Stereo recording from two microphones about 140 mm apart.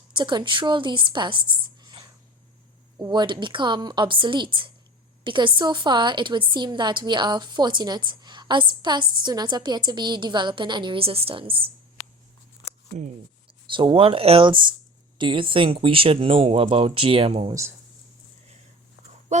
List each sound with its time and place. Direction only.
0.1 s speech: 35° right (ahead or behind)
3.0 s a woman's voice: 30° right (ahead or behind)
13.7 s a woman's voice: 35° right (ahead or behind)
19.3 s speech: 55° right (ahead or behind)